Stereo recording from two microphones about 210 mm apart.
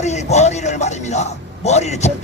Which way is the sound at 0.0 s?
35° left (ahead or behind).